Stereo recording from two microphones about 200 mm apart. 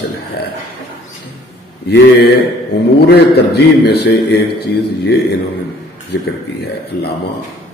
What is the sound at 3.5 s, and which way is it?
A man's voice, 55° left (ahead or behind).